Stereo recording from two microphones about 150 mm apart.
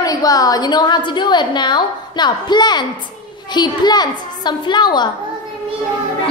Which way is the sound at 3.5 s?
30° left (ahead or behind).